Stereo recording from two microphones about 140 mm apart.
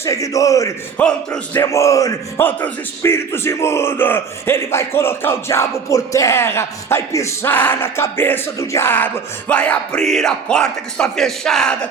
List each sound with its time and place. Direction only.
0.0 s music: 25° left (ahead or behind)
0.9 s speech: 10° left (ahead or behind)
1.6 s music: 20° left (ahead or behind)
2.6 s speech: 15° left (ahead or behind)